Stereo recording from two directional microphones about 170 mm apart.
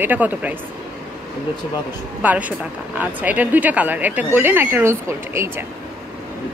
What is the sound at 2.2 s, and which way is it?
A woman's voice, 10° right (ahead or behind).